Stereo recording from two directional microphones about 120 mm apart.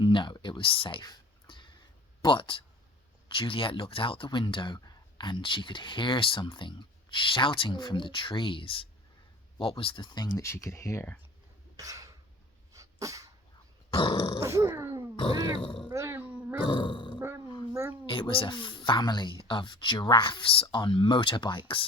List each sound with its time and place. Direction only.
0.0 s a sound: 40° left (ahead or behind)
2.2 s speech: 45° left (ahead or behind); by 11.0 s 25° left (ahead or behind)
11.8 s cough: 30° right (ahead or behind)
12.7 s dog: 30° right (ahead or behind)
13.9 s grunt: 45° left (ahead or behind)
14.4 s grunt: 25° right (ahead or behind)
15.1 s grunt: 40° left (ahead or behind)
15.9 s wild animals: 25° right (ahead or behind)
16.6 s grunt: 45° left (ahead or behind)
17.2 s roar: 20° right (ahead or behind)
18.1 s speech: 45° left (ahead or behind)